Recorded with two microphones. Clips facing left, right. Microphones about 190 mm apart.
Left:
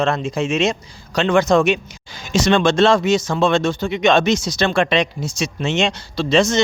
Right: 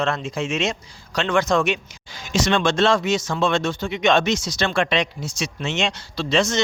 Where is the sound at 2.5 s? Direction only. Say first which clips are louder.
Left 5 dB; 30° left (ahead or behind).